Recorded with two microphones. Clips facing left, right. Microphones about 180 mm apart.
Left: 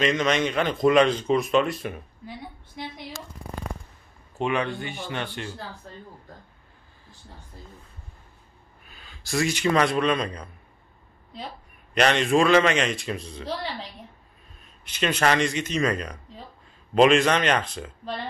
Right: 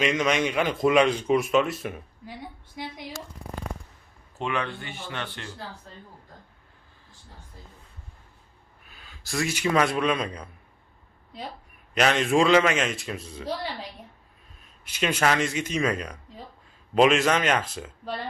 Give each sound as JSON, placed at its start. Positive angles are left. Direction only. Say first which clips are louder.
{"t": 0.0, "sound": "speech", "louder": "left 1 dB", "side_deg": -10}
{"t": 4.4, "sound": "speech", "louder": "left 4 dB", "side_deg": 15}
{"t": 8.8, "sound": "a man's voice", "louder": "left 1 dB", "side_deg": 0}
{"t": 11.9, "sound": "speech", "louder": "left 2 dB", "side_deg": -5}
{"t": 12.4, "sound": "speech", "louder": "even", "side_deg": -15}
{"t": 12.6, "sound": "speech", "louder": "left 2 dB", "side_deg": -5}
{"t": 14.9, "sound": "speech", "louder": "left 1 dB", "side_deg": -10}